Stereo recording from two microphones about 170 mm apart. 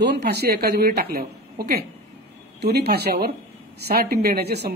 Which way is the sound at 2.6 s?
75° right (ahead or behind).